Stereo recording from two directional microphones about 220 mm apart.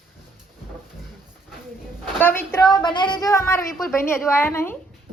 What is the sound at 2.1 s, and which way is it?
Speech, 10° left (ahead or behind).